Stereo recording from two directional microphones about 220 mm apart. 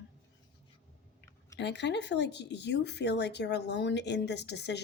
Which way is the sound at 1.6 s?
50° left (ahead or behind).